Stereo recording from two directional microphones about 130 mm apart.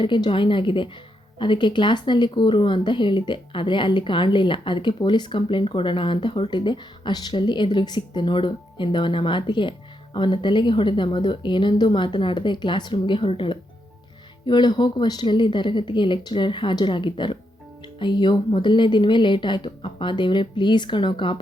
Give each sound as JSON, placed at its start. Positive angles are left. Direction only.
{"t": 0.0, "sound": "speech", "side_deg": 40}